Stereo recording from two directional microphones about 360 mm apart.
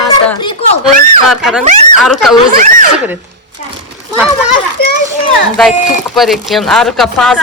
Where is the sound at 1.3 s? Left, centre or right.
Centre.